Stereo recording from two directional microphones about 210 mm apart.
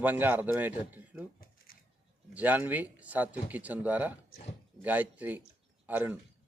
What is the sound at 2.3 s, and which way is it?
Speech, 5° right (ahead or behind).